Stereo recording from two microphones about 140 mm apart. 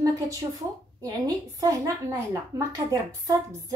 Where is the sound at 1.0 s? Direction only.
25° right (ahead or behind).